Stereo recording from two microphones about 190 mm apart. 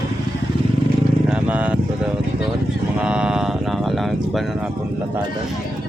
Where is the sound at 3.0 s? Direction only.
5° right (ahead or behind).